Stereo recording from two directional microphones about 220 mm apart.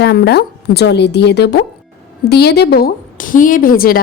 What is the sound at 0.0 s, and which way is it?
A woman's voice, 45° left (ahead or behind).